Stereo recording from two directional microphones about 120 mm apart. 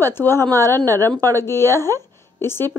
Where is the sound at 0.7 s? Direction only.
25° right (ahead or behind).